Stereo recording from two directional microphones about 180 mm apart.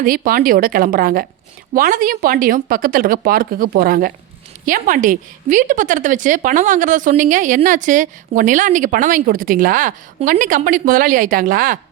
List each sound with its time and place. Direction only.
0.0 s speech: 50° right (ahead or behind)